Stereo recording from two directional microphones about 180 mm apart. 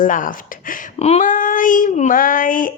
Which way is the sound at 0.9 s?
35° left (ahead or behind).